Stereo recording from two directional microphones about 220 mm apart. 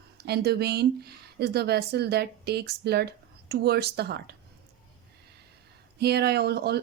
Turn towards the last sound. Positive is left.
turn(degrees=-50)  # may be behind; listen again after turning